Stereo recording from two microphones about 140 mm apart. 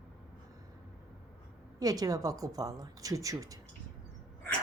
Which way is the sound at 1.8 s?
25° right (ahead or behind).